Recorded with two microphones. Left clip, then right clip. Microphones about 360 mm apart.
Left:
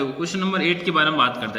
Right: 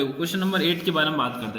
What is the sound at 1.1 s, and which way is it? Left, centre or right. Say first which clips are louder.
Speech: left 6 dB; centre.